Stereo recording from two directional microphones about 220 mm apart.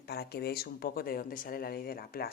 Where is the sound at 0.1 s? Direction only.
45° left (ahead or behind).